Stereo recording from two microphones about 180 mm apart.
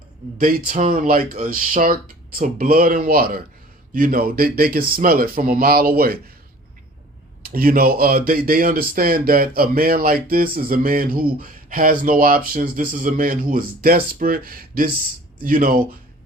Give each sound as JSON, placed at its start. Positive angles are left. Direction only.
{"t": 0.3, "sound": "speech", "side_deg": -45}
{"t": 7.4, "sound": "speech", "side_deg": -55}